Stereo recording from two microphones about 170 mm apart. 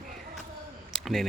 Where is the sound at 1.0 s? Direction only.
Centre (ahead or behind).